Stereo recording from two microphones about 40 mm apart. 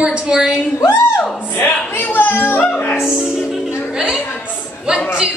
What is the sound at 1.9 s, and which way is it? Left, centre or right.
Music, left.